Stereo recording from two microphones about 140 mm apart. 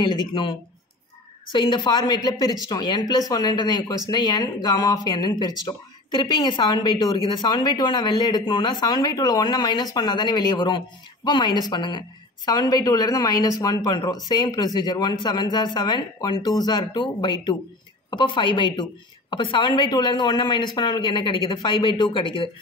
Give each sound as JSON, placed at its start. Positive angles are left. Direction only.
{"t": 0.0, "sound": "speech", "side_deg": 30}